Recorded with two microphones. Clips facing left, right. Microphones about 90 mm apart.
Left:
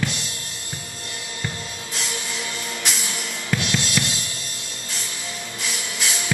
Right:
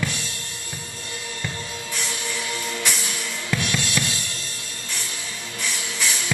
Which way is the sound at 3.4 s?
20° left (ahead or behind).